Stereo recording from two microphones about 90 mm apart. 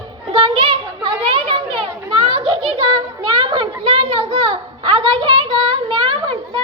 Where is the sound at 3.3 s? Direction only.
65° right (ahead or behind).